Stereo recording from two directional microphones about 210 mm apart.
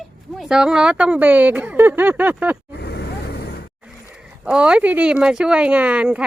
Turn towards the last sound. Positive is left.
turn(degrees=-5)  # may be behind; listen again after turning